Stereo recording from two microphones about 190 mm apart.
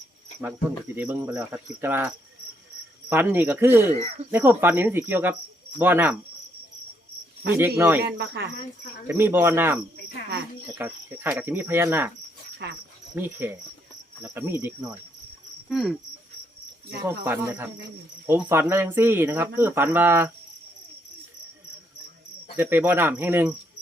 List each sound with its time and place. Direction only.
0.9 s speech: 10° right (ahead or behind)
7.4 s speech: 10° right (ahead or behind)
8.0 s insect: 60° right (ahead or behind)
9.0 s speech: 10° right (ahead or behind)
12.6 s insect: 60° right (ahead or behind)
13.1 s speech: 10° right (ahead or behind)
15.7 s insect: centre (ahead or behind)
17.0 s speech: 10° right (ahead or behind)
22.5 s speech: 10° right (ahead or behind)